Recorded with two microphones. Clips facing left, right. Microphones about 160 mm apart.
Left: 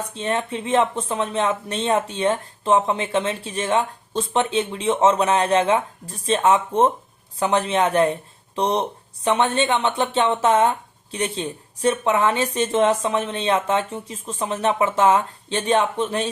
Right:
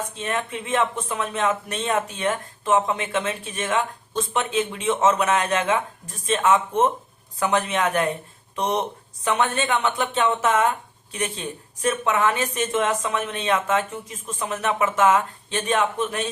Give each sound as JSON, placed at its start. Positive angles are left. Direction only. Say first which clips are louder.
{"t": 0.1, "sound": "speech", "louder": "left 3 dB", "side_deg": 30}